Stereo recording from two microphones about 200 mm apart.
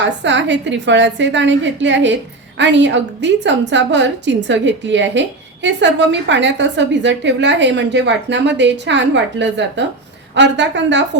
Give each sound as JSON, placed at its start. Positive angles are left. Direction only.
{"t": 0.0, "sound": "a woman's voice", "side_deg": -65}